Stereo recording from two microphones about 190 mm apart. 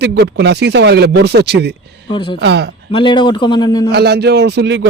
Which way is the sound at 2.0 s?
25° left (ahead or behind).